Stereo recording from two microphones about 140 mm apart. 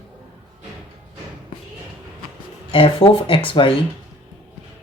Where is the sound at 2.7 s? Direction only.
40° left (ahead or behind).